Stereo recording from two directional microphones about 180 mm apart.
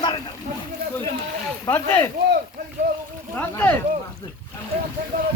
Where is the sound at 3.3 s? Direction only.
10° left (ahead or behind).